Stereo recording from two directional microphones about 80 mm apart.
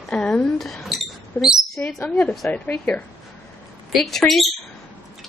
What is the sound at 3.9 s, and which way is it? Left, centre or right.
Speech, centre.